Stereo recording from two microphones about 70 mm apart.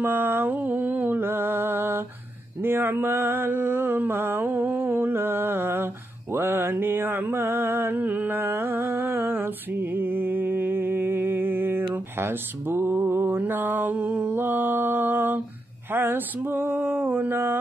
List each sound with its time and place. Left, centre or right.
0.0 s music: right
2.6 s mantra: right
15.9 s a sound: right